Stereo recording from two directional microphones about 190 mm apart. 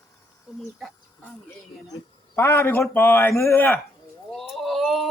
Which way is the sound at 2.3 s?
15° left (ahead or behind).